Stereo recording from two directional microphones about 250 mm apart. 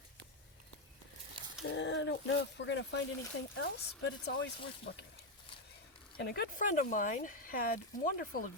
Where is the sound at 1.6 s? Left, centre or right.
Left.